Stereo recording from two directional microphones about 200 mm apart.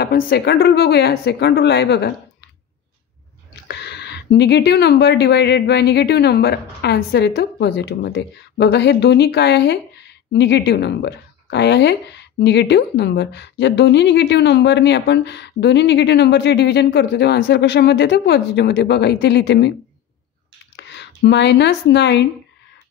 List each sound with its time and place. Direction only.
0.0 s speech: 50° left (ahead or behind)
3.6 s speech: 55° left (ahead or behind)
20.7 s speech: 60° left (ahead or behind)